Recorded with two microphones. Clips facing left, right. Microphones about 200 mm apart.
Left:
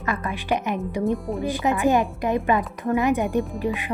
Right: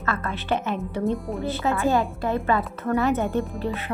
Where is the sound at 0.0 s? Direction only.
15° left (ahead or behind).